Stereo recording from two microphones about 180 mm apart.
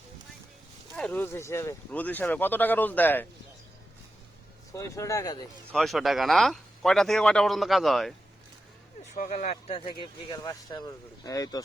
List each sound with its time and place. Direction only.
0.9 s speech: 5° left (ahead or behind)
4.7 s speech: 15° left (ahead or behind)
5.7 s speech: centre (ahead or behind)
9.1 s speech: 45° left (ahead or behind)
9.6 s speech: 30° left (ahead or behind)